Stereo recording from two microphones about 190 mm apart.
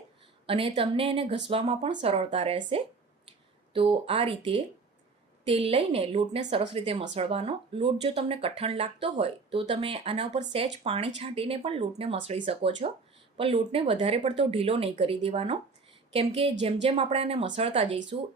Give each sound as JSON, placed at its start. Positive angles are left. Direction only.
{"t": 0.4, "sound": "speech", "side_deg": -30}